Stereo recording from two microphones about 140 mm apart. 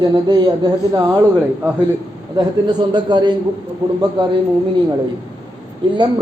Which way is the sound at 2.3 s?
30° right (ahead or behind).